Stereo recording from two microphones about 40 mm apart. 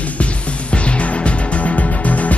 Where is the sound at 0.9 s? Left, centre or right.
Left.